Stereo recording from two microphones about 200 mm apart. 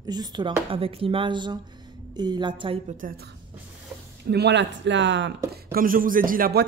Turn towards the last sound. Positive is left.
turn(degrees=-50)  # may be behind; listen again after turning